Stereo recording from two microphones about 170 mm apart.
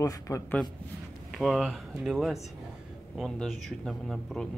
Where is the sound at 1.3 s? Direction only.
Centre (ahead or behind).